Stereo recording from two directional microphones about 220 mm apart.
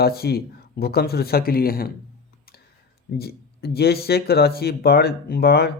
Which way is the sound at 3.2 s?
45° left (ahead or behind).